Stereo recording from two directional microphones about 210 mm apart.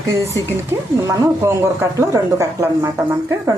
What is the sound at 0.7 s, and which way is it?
Speech, 10° right (ahead or behind).